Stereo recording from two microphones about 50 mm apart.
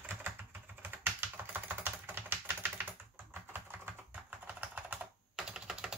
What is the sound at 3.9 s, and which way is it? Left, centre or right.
Typing, right.